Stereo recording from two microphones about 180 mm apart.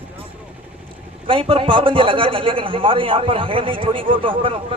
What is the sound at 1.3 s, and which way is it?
A man's voice, 30° right (ahead or behind).